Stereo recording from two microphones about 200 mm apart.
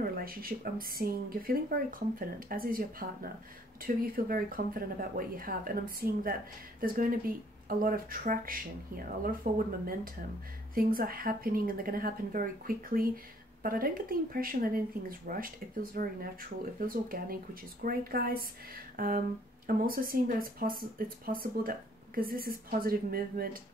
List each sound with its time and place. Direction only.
0.2 s speech: 45° right (ahead or behind)